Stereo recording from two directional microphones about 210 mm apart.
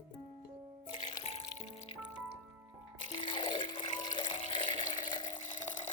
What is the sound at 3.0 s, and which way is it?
Water, 25° left (ahead or behind).